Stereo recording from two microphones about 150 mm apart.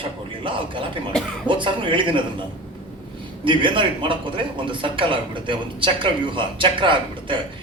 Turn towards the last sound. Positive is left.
turn(degrees=-35)  # may be behind; listen again after turning